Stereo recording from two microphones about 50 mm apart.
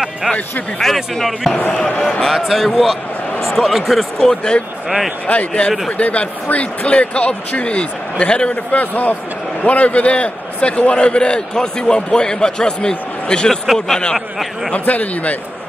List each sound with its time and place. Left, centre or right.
0.7 s speech: centre
4.2 s speech: centre
4.8 s speech: centre
5.2 s a man's voice: left
8.7 s a man's voice: left; by 14.1 s centre
14.7 s speech: left